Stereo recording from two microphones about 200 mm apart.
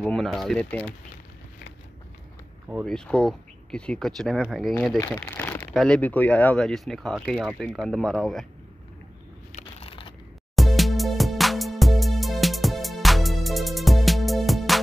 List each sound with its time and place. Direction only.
0.0 s speech: 5° left (ahead or behind)
2.7 s speech: centre (ahead or behind)
5.0 s crumpling: 10° left (ahead or behind)
5.7 s speech: 5° left (ahead or behind)
9.5 s crushing: 35° left (ahead or behind)
10.5 s music: centre (ahead or behind)